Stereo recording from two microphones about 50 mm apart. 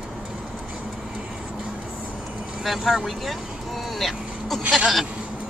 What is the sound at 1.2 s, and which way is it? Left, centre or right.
Vehicle, centre.